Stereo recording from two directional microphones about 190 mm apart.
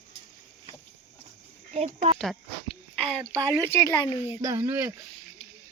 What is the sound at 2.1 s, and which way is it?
Speech, centre (ahead or behind).